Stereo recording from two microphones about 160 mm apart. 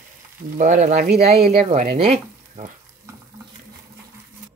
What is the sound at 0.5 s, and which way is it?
Speech, 50° right (ahead or behind).